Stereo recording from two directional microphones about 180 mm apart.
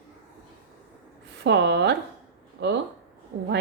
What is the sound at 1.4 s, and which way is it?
A woman's voice, 75° right (ahead or behind).